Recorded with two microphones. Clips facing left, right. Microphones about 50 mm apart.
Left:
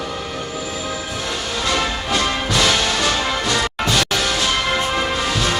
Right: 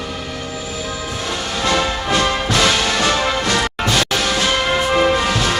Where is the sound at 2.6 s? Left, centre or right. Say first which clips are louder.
Right 1 dB; centre.